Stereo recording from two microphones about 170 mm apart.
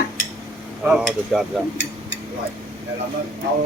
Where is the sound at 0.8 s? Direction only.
5° right (ahead or behind).